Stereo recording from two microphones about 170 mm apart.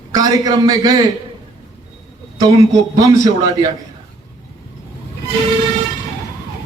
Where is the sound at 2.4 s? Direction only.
20° right (ahead or behind).